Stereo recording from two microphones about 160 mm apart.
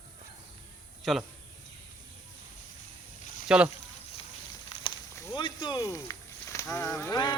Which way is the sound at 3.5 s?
5° right (ahead or behind).